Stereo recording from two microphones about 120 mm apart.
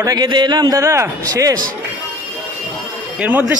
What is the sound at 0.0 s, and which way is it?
A man's voice, 35° right (ahead or behind).